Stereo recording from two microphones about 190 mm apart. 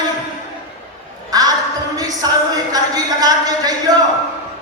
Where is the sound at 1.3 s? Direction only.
20° right (ahead or behind).